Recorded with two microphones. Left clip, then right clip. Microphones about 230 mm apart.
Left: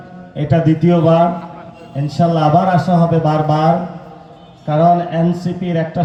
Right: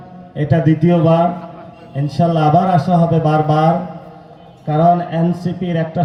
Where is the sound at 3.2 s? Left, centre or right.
Right.